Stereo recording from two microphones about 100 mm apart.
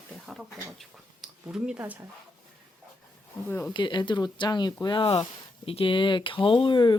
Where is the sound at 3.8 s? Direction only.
50° left (ahead or behind).